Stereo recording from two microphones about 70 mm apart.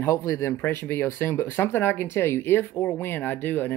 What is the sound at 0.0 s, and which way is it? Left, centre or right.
Speech, left.